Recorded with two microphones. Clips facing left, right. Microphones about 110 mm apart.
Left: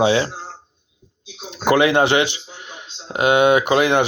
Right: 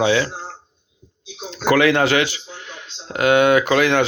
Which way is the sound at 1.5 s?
20° left (ahead or behind).